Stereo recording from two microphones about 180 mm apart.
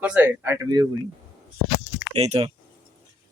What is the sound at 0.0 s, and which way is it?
Speech, 10° right (ahead or behind).